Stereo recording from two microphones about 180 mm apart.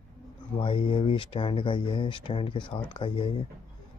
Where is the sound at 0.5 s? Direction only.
30° left (ahead or behind).